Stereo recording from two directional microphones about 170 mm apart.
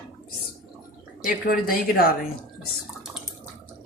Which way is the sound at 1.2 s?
60° left (ahead or behind).